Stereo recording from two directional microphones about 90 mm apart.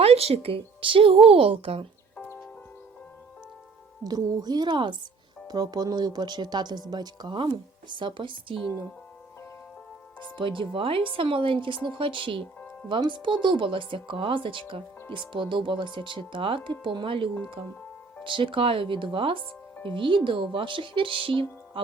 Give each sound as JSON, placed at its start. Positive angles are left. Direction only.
{"t": 0.0, "sound": "speech", "side_deg": -90}
{"t": 2.1, "sound": "horse", "side_deg": 15}
{"t": 4.0, "sound": "speech", "side_deg": -45}
{"t": 5.5, "sound": "speech", "side_deg": -45}
{"t": 10.2, "sound": "speech", "side_deg": -65}
{"t": 12.9, "sound": "speech", "side_deg": -60}